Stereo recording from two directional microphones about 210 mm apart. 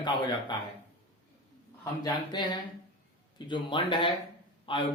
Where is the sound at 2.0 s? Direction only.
20° left (ahead or behind).